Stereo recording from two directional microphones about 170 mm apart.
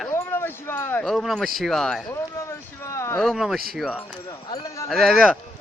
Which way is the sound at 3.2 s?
Centre (ahead or behind).